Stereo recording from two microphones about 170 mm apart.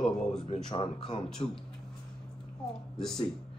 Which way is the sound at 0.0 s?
5° left (ahead or behind).